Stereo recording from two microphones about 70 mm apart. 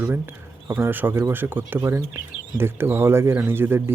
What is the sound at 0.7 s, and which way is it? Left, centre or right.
A man's voice, right.